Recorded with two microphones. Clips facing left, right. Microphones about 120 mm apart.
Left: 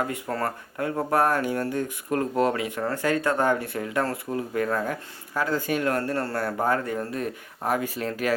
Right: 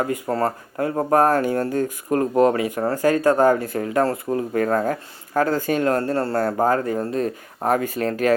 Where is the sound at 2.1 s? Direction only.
25° right (ahead or behind).